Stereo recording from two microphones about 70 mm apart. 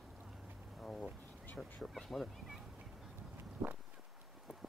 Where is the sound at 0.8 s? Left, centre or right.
Centre.